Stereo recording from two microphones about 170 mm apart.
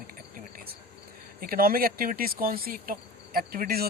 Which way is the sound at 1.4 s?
60° right (ahead or behind).